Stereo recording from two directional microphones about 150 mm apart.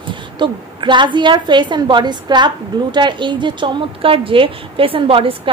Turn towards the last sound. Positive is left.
turn(degrees=-35)  # may be behind; listen again after turning